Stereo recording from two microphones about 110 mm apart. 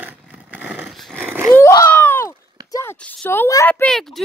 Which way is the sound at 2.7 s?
20° left (ahead or behind).